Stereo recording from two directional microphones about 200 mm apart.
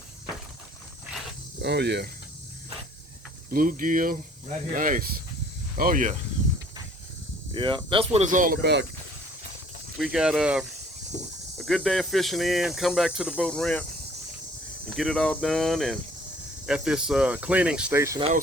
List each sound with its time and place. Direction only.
1.6 s speech: 55° right (ahead or behind)
3.5 s speech: 45° right (ahead or behind)
7.5 s speech: 25° right (ahead or behind); by 8.9 s 60° right (ahead or behind)
10.0 s speech: 5° right (ahead or behind)
14.8 s speech: centre (ahead or behind); by 18.2 s 15° right (ahead or behind)